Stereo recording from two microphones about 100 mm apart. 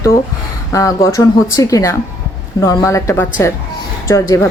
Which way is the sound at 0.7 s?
35° left (ahead or behind).